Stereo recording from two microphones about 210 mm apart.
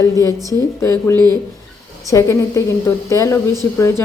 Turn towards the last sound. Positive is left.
turn(degrees=15)  # may be behind; listen again after turning